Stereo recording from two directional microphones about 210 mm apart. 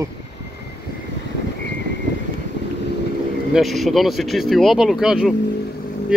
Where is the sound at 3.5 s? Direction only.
Centre (ahead or behind).